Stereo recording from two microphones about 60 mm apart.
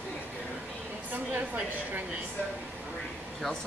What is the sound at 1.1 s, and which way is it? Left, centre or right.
Speech, right.